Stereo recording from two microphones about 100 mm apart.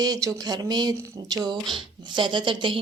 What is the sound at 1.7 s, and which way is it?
A woman's voice, 55° right (ahead or behind).